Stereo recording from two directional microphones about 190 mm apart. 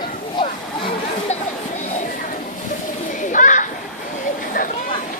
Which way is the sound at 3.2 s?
40° left (ahead or behind).